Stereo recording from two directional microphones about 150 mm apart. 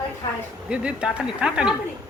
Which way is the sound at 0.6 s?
5° right (ahead or behind).